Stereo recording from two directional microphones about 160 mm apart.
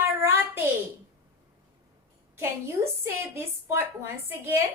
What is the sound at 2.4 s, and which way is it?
A child's voice, 15° right (ahead or behind).